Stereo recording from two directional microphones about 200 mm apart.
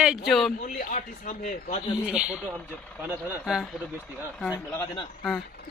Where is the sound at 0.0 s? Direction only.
5° right (ahead or behind).